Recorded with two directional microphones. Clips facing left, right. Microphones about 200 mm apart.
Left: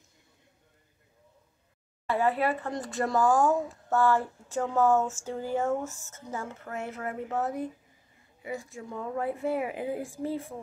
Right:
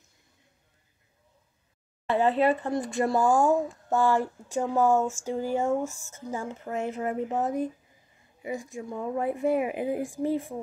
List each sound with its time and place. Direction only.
2.0 s speech: 20° right (ahead or behind)